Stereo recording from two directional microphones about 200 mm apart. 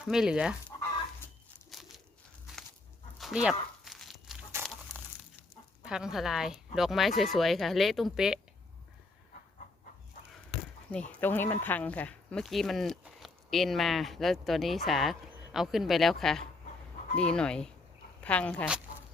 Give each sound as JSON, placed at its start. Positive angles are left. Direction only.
{"t": 0.0, "sound": "speech", "side_deg": -5}
{"t": 1.7, "sound": "crumpling", "side_deg": 0}
{"t": 3.2, "sound": "a sound", "side_deg": 0}
{"t": 4.6, "sound": "crumpling", "side_deg": -10}
{"t": 5.8, "sound": "speech", "side_deg": 0}
{"t": 11.1, "sound": "speech", "side_deg": 10}